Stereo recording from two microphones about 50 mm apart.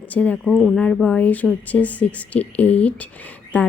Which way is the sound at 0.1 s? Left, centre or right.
Left.